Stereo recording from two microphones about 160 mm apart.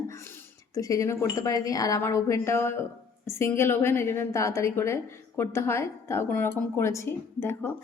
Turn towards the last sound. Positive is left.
turn(degrees=15)  # may be behind; listen again after turning